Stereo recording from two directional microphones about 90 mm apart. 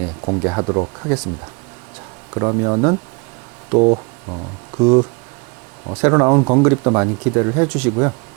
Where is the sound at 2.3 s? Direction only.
30° right (ahead or behind).